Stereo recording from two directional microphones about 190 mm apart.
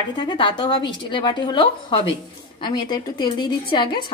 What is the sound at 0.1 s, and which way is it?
A woman's voice, 25° left (ahead or behind).